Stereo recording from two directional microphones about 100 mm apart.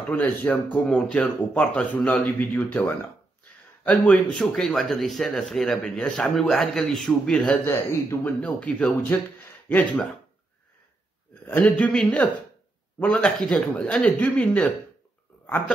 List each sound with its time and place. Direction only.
0.1 s speech: 15° left (ahead or behind)
7.6 s speech: 30° left (ahead or behind)
8.2 s speech: 15° left (ahead or behind)
11.4 s speech: 15° left (ahead or behind)